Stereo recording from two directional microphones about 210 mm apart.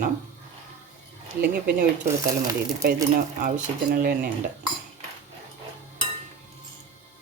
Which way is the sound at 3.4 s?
40° right (ahead or behind).